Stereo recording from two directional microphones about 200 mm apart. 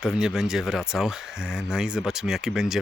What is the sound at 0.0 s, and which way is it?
Speech, 5° right (ahead or behind).